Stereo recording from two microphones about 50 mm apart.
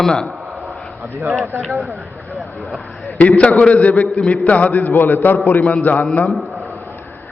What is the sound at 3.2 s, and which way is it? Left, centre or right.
A man's voice, left.